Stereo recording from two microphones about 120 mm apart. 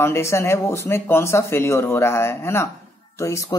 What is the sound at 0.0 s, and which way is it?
Speech, 20° left (ahead or behind).